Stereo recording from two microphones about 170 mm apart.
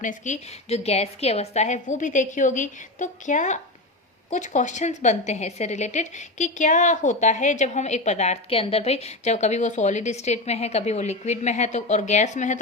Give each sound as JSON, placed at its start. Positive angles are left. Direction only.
{"t": 0.0, "sound": "a woman's voice", "side_deg": 45}